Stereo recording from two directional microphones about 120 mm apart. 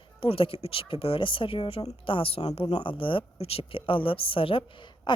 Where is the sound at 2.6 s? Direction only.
45° left (ahead or behind).